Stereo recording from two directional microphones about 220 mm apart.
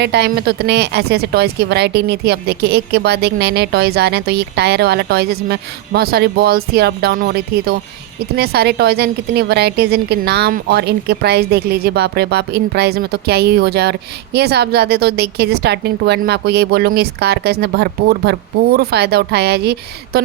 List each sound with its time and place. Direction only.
0.0 s speech: 50° right (ahead or behind)